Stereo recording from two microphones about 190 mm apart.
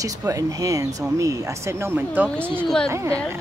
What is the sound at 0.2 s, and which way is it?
Speech, 15° right (ahead or behind).